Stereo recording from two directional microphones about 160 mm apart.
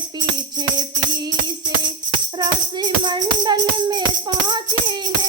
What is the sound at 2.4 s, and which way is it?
Speech, 25° right (ahead or behind).